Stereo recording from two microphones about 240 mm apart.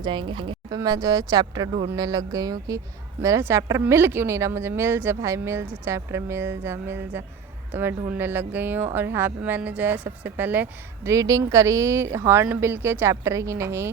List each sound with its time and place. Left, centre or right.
0.0 s a woman's voice: centre